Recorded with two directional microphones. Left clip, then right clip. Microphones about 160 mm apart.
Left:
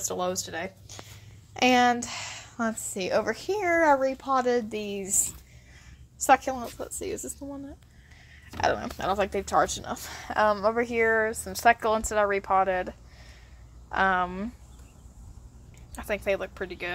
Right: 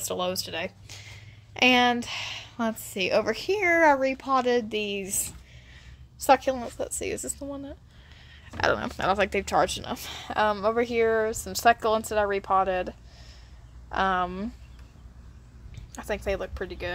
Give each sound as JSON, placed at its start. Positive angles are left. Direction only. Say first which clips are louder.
{"t": 0.0, "sound": "speech", "louder": "right 1 dB", "side_deg": -10}
{"t": 1.5, "sound": "a woman's voice", "louder": "right 1 dB", "side_deg": 0}
{"t": 6.8, "sound": "speech", "louder": "right 3 dB", "side_deg": -30}
{"t": 8.5, "sound": "speech", "louder": "right 1 dB", "side_deg": -20}
{"t": 8.8, "sound": "speech", "louder": "right 2 dB", "side_deg": -30}
{"t": 9.7, "sound": "speech", "louder": "right 1 dB", "side_deg": -15}
{"t": 15.9, "sound": "speech", "louder": "left 2 dB", "side_deg": 0}